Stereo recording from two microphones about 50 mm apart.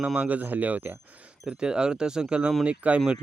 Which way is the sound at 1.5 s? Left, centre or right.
Centre.